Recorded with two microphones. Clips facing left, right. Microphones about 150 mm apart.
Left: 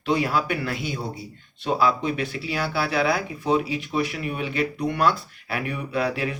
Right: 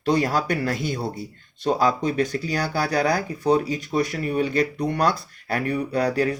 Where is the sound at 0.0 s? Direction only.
40° right (ahead or behind).